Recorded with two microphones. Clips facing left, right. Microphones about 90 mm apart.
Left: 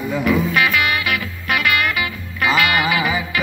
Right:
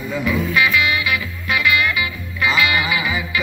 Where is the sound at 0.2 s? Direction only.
50° left (ahead or behind).